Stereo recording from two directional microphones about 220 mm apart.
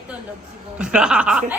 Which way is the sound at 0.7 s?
5° right (ahead or behind).